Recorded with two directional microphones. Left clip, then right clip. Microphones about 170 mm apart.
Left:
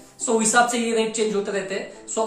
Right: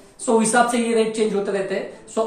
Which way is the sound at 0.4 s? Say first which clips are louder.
Even; 10° left (ahead or behind).